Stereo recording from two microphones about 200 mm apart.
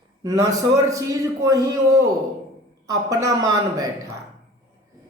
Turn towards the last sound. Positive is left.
turn(degrees=-20)  # may be behind; listen again after turning